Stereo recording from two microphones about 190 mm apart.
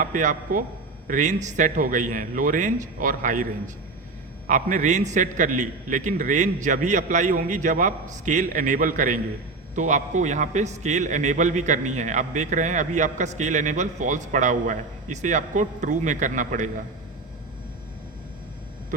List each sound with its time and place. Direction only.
0.0 s a man's voice: 45° right (ahead or behind)
4.4 s a man's voice: 40° right (ahead or behind)